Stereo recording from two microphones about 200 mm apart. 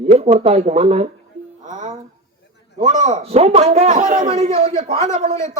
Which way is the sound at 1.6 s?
40° right (ahead or behind).